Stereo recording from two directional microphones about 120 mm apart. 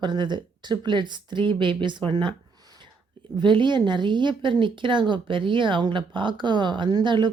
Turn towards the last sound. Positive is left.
turn(degrees=-40)  # may be behind; listen again after turning